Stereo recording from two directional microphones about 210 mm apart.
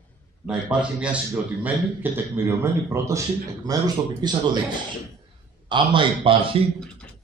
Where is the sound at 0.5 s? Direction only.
5° right (ahead or behind).